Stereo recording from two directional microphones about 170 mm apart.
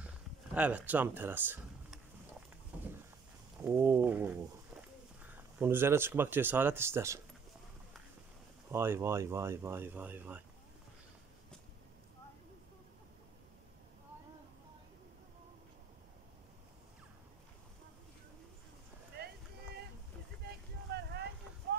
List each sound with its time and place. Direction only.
0.6 s speech: 10° right (ahead or behind)
2.7 s a sound: 5° right (ahead or behind)
3.6 s speech: 15° right (ahead or behind)
8.7 s speech: 15° right (ahead or behind)
19.2 s a sound: 70° right (ahead or behind)
20.4 s vehicle: 75° right (ahead or behind)